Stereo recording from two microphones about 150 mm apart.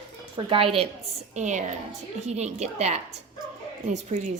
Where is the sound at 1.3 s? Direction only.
55° right (ahead or behind).